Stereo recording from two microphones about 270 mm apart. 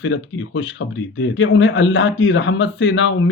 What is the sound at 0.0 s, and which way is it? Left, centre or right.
Speech, left.